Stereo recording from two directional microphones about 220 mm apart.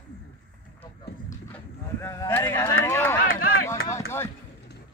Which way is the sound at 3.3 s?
40° left (ahead or behind).